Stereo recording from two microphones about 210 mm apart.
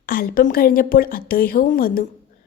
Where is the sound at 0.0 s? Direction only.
45° left (ahead or behind).